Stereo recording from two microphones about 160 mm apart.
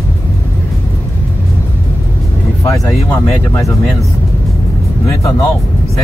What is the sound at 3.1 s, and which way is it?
Speech, 15° left (ahead or behind).